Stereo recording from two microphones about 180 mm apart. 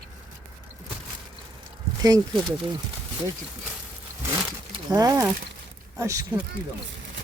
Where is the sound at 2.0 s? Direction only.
20° right (ahead or behind).